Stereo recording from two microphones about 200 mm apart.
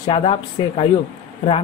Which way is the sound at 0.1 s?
30° left (ahead or behind).